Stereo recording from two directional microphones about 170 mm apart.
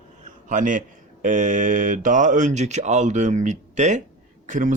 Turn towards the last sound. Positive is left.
turn(degrees=-50)  # may be behind; listen again after turning